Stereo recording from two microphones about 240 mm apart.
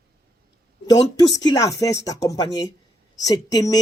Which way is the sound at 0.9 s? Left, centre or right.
Centre.